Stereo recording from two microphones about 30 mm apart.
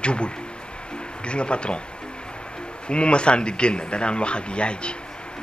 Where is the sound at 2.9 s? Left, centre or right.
Left.